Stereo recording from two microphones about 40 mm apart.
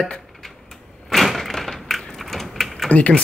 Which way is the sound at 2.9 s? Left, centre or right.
Left.